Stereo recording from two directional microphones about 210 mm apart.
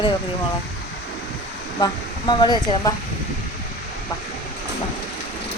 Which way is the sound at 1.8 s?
20° left (ahead or behind).